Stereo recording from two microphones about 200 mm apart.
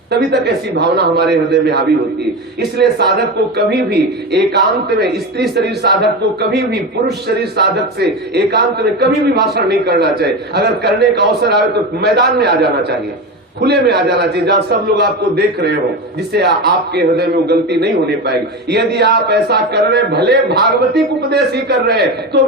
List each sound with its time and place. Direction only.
0.1 s a man's voice: 55° right (ahead or behind)